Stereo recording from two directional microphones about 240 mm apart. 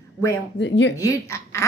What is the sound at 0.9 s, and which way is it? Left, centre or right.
Speech, centre.